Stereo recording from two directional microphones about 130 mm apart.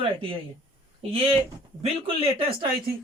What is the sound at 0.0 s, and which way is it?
Speech, 45° right (ahead or behind).